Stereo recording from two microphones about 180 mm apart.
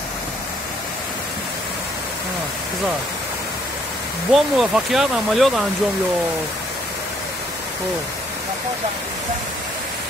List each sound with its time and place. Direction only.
4.3 s speech: centre (ahead or behind)